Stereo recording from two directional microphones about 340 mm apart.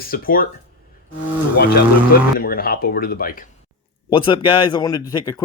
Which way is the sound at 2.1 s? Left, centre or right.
Left.